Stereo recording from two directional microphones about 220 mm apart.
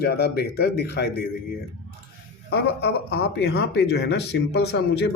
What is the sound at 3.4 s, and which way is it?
A man's voice, 50° left (ahead or behind).